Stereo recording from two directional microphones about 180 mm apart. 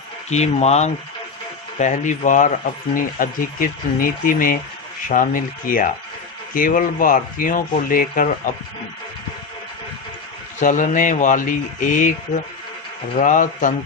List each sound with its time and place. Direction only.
0.3 s speech: 40° left (ahead or behind)
10.6 s speech: 45° left (ahead or behind)
13.1 s speech: 45° left (ahead or behind)